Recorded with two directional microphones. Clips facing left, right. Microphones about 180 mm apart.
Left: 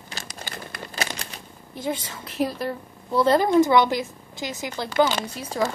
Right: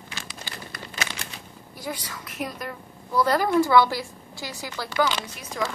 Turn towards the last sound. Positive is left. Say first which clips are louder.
# left 5 dB
turn(degrees=30)  # may be behind; listen again after turning